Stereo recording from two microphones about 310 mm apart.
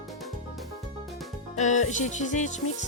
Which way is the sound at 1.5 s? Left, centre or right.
Left.